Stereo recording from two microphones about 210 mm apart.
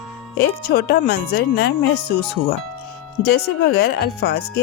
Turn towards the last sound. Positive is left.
turn(degrees=50)  # may be behind; listen again after turning